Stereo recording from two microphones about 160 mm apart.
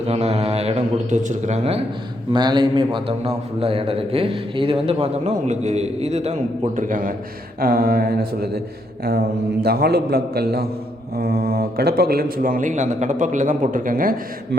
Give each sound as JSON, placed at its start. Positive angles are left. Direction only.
{"t": 0.1, "sound": "a man's voice", "side_deg": -40}
{"t": 2.3, "sound": "a man's voice", "side_deg": -30}
{"t": 6.7, "sound": "speech", "side_deg": -55}
{"t": 7.6, "sound": "mantra", "side_deg": -65}
{"t": 9.0, "sound": "a man's voice", "side_deg": -85}